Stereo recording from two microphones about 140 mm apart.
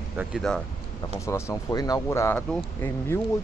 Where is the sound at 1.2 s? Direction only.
20° left (ahead or behind).